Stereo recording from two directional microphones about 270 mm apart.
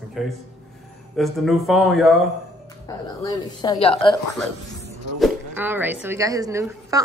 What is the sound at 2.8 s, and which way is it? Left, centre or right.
A woman's voice, centre.